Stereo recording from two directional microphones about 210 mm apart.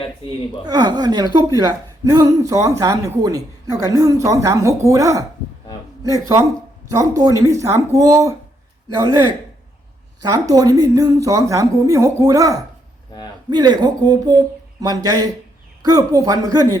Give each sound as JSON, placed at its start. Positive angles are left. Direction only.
{"t": 0.6, "sound": "a woman's voice", "side_deg": -20}